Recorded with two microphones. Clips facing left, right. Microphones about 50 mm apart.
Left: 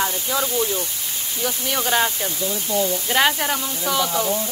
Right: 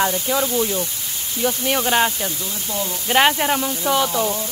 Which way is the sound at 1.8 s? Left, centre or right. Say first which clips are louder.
Right 1 dB; centre.